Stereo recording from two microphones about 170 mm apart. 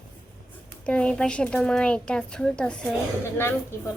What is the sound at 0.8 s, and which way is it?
Speech, 5° left (ahead or behind).